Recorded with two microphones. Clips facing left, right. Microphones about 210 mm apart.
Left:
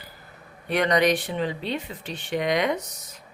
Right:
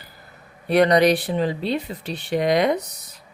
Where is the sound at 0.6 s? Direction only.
35° right (ahead or behind).